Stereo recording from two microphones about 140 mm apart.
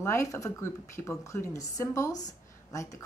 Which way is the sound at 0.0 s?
20° left (ahead or behind).